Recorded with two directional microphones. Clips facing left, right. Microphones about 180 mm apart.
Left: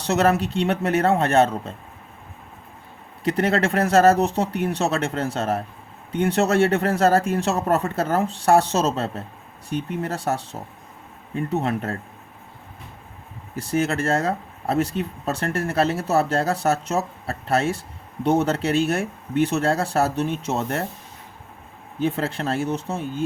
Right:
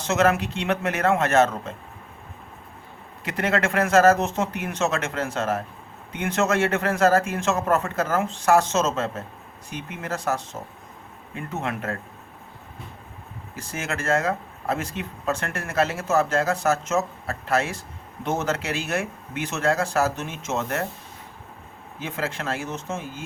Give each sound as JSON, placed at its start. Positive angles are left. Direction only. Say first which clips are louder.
{"t": 0.0, "sound": "a man's voice", "louder": "left 1 dB", "side_deg": 35}
{"t": 3.2, "sound": "a man's voice", "louder": "left 3 dB", "side_deg": 30}
{"t": 13.6, "sound": "a man's voice", "louder": "left 8 dB", "side_deg": 35}
{"t": 22.0, "sound": "a man's voice", "louder": "left 6 dB", "side_deg": 35}